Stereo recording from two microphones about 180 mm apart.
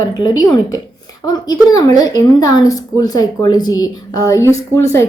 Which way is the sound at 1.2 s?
20° left (ahead or behind).